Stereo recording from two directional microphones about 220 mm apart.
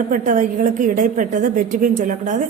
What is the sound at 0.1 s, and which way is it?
A woman's voice, 35° right (ahead or behind).